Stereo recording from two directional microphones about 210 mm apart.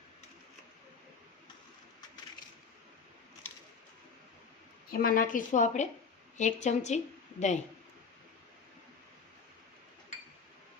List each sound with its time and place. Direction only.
4.9 s a woman's voice: 45° left (ahead or behind)